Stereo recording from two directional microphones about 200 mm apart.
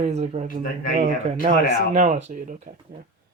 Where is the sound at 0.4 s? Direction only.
45° left (ahead or behind).